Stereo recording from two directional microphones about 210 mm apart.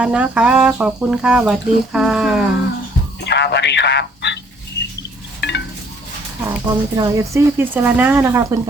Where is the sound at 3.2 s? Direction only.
55° left (ahead or behind).